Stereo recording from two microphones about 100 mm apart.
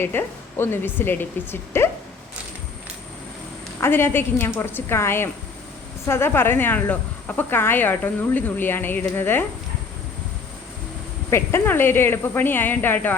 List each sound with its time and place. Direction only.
0.0 s speech: 20° left (ahead or behind)
3.8 s speech: 25° left (ahead or behind)
11.3 s speech: 25° left (ahead or behind)